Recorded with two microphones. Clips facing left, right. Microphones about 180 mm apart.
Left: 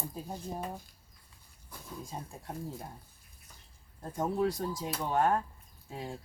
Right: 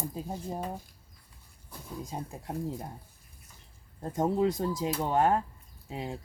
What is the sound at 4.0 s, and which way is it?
Speech, 20° right (ahead or behind).